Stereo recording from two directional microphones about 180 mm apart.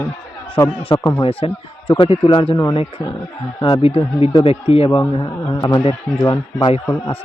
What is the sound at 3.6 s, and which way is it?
A man's voice, 30° left (ahead or behind).